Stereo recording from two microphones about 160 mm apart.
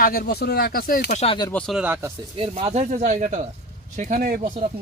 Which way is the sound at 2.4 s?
40° right (ahead or behind).